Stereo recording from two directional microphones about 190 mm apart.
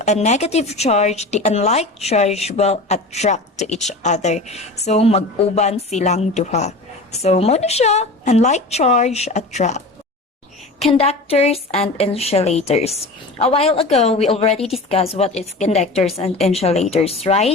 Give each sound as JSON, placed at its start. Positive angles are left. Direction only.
{"t": 0.0, "sound": "a woman's voice", "side_deg": 35}